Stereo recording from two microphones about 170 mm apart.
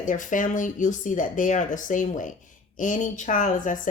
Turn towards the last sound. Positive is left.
turn(degrees=50)  # may be behind; listen again after turning